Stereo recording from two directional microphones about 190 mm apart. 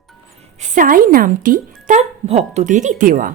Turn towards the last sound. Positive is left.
turn(degrees=-45)  # may be behind; listen again after turning